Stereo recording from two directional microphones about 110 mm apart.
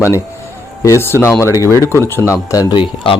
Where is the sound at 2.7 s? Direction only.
45° left (ahead or behind).